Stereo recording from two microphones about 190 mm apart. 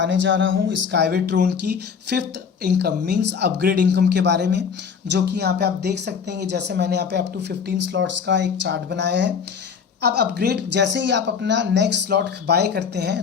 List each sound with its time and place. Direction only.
0.0 s speech: 75° right (ahead or behind); by 1.5 s 60° right (ahead or behind)
2.6 s speech: 60° right (ahead or behind)
7.9 s speech: 70° right (ahead or behind)